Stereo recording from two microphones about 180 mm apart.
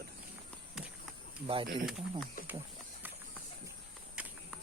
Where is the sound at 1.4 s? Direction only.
30° right (ahead or behind).